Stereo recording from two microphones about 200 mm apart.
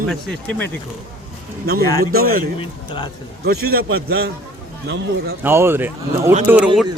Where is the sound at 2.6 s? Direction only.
25° left (ahead or behind).